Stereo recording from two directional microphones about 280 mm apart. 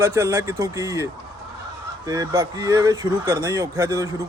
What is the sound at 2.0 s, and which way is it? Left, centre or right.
Speech, centre.